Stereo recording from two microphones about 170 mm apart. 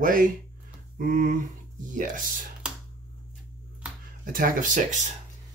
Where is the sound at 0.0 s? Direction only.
55° right (ahead or behind).